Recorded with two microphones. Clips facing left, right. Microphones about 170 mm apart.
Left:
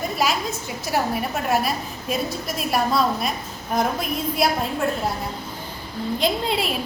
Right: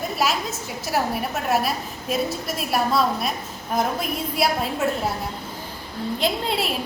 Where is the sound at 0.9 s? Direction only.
Centre (ahead or behind).